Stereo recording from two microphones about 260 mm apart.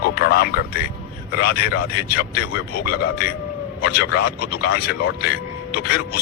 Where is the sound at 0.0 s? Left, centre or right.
Left.